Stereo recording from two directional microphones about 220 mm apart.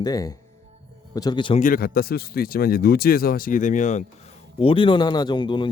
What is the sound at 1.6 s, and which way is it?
Speech, 40° left (ahead or behind).